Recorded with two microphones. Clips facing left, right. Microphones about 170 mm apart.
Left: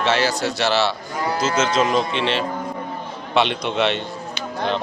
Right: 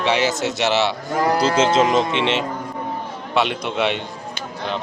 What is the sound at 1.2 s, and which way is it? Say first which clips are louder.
Speech: right 3 dB; 35° right (ahead or behind).